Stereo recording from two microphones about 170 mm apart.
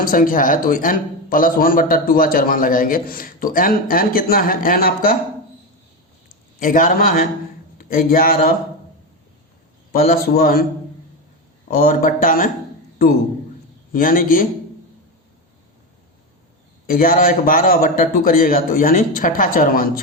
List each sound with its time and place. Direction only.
0.0 s speech: 55° left (ahead or behind)
6.6 s a man's voice: 50° left (ahead or behind)
9.9 s speech: 60° left (ahead or behind)
11.7 s speech: 55° left (ahead or behind)
13.9 s speech: 55° left (ahead or behind)
16.8 s speech: 55° left (ahead or behind)